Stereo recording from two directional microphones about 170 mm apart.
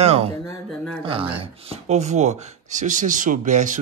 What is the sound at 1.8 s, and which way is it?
Speech, 40° right (ahead or behind).